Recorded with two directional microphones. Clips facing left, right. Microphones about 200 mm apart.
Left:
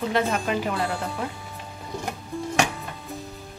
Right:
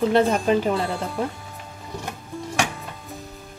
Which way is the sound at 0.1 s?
30° right (ahead or behind).